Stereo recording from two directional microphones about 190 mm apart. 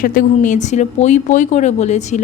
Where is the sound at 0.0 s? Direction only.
45° left (ahead or behind).